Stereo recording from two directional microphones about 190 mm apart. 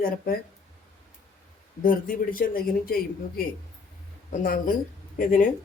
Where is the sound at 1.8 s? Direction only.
45° left (ahead or behind).